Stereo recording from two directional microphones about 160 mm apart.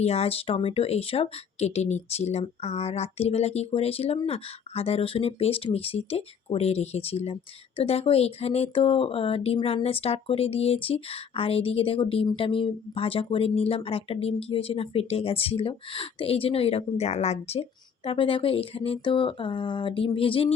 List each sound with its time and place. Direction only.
0.0 s speech: 40° left (ahead or behind)